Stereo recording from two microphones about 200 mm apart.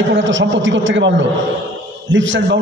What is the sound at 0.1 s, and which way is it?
A man's voice, 70° right (ahead or behind).